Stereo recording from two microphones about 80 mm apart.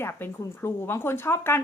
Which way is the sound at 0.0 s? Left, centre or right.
Left.